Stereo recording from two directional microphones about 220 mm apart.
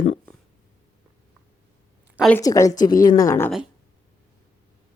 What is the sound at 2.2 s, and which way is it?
Speech, 5° left (ahead or behind).